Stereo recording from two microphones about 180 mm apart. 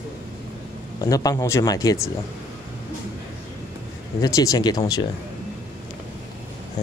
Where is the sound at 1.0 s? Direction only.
20° left (ahead or behind).